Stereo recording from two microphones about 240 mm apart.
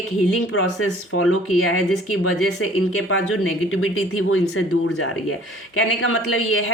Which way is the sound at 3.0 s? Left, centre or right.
Left.